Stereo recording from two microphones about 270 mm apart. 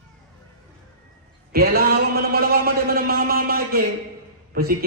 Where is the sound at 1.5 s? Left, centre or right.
Right.